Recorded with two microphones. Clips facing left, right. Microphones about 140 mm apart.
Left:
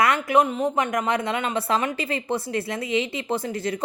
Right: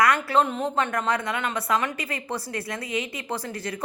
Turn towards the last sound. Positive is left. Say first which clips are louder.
# left 5 dB
turn(degrees=25)  # may be behind; listen again after turning